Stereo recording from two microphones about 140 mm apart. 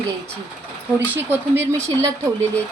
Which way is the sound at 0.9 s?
15° right (ahead or behind).